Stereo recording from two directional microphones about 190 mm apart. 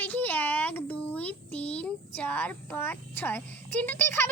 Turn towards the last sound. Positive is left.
turn(degrees=10)  # may be behind; listen again after turning